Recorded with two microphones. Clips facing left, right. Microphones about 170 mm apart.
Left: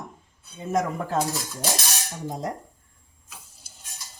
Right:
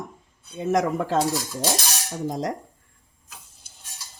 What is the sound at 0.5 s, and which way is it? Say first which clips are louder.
Speech: right 4 dB; 75° right (ahead or behind).